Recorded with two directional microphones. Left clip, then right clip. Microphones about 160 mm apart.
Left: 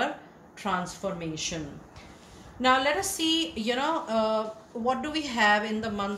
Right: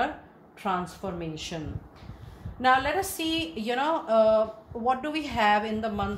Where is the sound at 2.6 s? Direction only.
45° right (ahead or behind).